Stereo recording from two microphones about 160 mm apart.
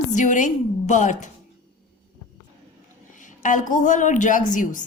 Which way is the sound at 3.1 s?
50° left (ahead or behind).